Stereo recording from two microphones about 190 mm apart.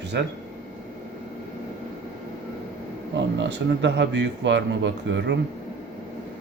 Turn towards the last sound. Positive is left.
turn(degrees=-70)  # may be behind; listen again after turning